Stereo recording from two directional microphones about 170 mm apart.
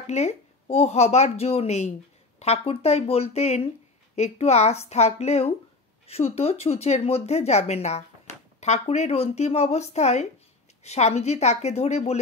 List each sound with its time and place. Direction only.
0.0 s speech: 40° left (ahead or behind)